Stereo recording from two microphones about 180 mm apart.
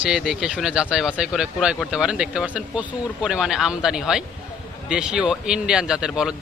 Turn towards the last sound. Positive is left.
turn(degrees=-5)  # may be behind; listen again after turning